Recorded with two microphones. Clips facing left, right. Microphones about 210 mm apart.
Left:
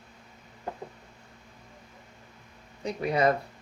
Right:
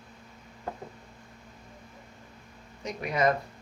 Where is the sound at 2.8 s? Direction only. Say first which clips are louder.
Left 2 dB; 30° left (ahead or behind).